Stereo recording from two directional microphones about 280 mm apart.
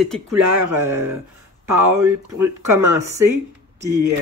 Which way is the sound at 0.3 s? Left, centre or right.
Right.